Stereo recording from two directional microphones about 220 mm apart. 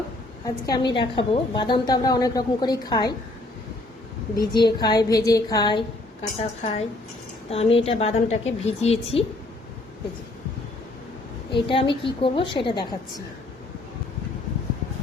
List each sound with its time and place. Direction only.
0.4 s a woman's voice: 15° left (ahead or behind)
4.4 s a woman's voice: 20° left (ahead or behind)
11.5 s a woman's voice: 25° left (ahead or behind)